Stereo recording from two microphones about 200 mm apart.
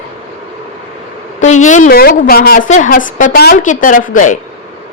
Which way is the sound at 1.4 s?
35° left (ahead or behind).